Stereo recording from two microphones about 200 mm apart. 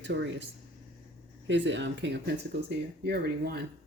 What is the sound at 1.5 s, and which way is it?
Speech, 65° right (ahead or behind).